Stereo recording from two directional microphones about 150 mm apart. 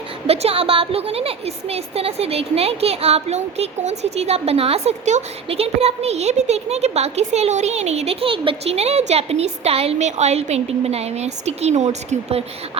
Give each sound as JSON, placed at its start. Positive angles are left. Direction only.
{"t": 0.3, "sound": "a woman's voice", "side_deg": -40}